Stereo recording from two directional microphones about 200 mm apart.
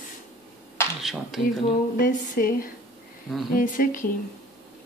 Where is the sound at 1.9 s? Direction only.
45° left (ahead or behind).